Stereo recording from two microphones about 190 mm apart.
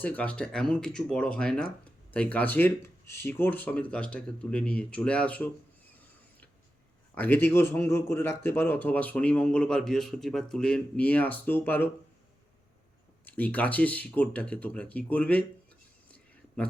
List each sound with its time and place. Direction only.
0.0 s a man's voice: 10° left (ahead or behind)
7.2 s a man's voice: 10° left (ahead or behind)
13.2 s a man's voice: 10° left (ahead or behind)